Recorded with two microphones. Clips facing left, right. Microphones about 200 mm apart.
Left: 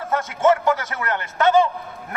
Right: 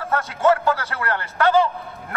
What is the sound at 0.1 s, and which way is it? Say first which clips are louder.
A man's voice: left 1 dB; 20° left (ahead or behind).